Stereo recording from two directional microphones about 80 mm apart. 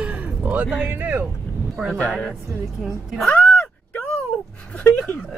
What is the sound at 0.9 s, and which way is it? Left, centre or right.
Speech, right.